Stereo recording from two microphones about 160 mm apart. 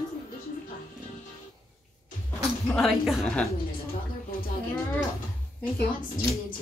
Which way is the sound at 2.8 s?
Centre (ahead or behind).